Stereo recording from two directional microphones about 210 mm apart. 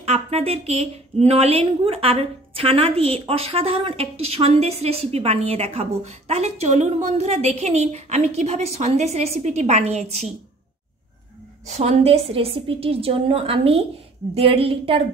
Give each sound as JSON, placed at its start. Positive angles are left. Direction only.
{"t": 0.0, "sound": "a woman's voice", "side_deg": -30}
{"t": 11.6, "sound": "a woman's voice", "side_deg": -30}